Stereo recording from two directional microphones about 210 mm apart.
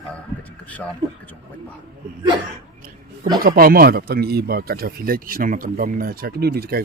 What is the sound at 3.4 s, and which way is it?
Speech, 45° right (ahead or behind).